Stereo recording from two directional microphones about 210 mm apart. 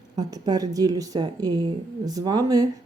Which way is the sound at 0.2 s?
15° right (ahead or behind).